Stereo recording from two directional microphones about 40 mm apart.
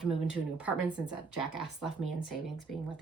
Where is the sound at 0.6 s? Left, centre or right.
Right.